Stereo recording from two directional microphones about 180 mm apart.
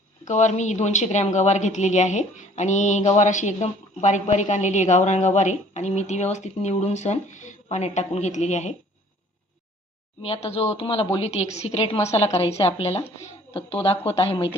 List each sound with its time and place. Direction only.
0.3 s a woman's voice: 40° left (ahead or behind)
10.2 s a woman's voice: 35° left (ahead or behind)